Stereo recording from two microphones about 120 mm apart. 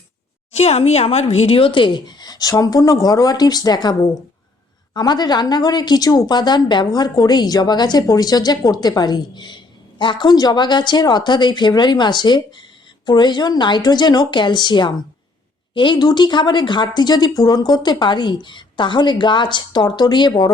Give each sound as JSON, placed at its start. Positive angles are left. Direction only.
{"t": 0.5, "sound": "speech", "side_deg": 60}